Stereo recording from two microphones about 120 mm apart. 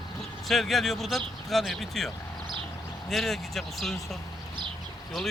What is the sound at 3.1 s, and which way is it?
Speech, centre (ahead or behind).